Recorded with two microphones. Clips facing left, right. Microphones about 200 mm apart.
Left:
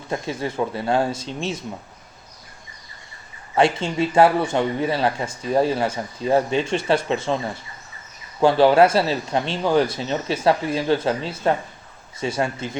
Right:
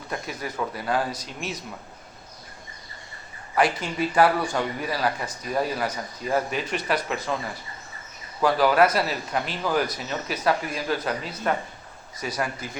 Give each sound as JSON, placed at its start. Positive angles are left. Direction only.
{"t": 0.1, "sound": "speech", "side_deg": 25}
{"t": 3.5, "sound": "speech", "side_deg": 25}